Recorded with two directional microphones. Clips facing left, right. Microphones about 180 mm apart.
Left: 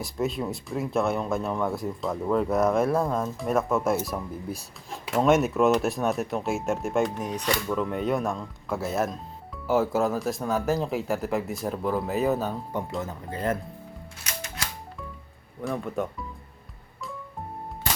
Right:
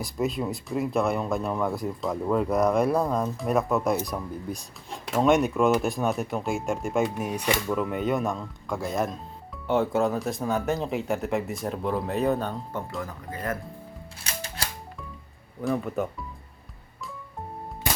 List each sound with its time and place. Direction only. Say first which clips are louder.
0.0 s speech: right 1 dB; centre (ahead or behind)
13.0 s speech: left 3 dB; 25° left (ahead or behind)
14.3 s music: right 1 dB; 30° right (ahead or behind)
15.6 s speech: right 2 dB; centre (ahead or behind)